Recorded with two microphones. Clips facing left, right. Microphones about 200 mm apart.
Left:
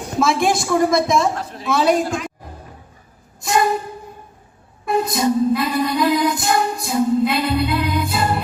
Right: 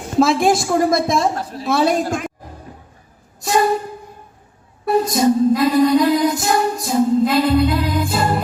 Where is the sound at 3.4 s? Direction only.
40° right (ahead or behind).